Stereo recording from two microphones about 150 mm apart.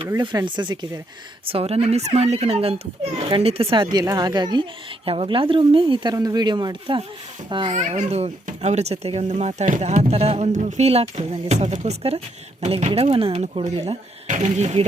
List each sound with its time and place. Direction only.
0.2 s a child's voice: 30° right (ahead or behind)
1.5 s a child's voice: 40° right (ahead or behind)
3.9 s a child's voice: 25° right (ahead or behind)
7.7 s a child's voice: 50° right (ahead or behind)
14.3 s speech: 55° right (ahead or behind)